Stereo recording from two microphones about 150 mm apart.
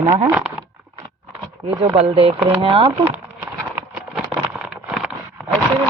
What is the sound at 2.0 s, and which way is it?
Speech, 40° right (ahead or behind).